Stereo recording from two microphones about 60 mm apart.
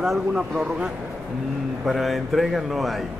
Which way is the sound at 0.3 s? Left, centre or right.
Centre.